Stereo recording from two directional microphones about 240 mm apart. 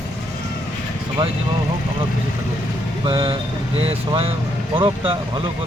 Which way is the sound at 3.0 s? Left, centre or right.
Right.